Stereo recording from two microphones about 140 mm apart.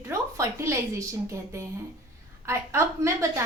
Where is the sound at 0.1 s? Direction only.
20° right (ahead or behind).